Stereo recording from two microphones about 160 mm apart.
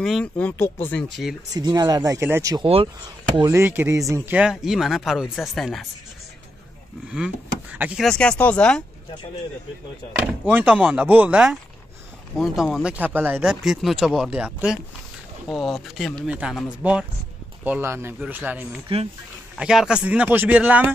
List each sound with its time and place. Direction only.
0.0 s speech: 5° left (ahead or behind)
1.5 s speech: 25° right (ahead or behind)
2.6 s speech: 35° right (ahead or behind)
3.3 s speech: 20° right (ahead or behind); by 5.9 s centre (ahead or behind)
7.1 s speech: 5° right (ahead or behind)
8.0 s speech: 5° left (ahead or behind)
10.2 s speech: 10° right (ahead or behind)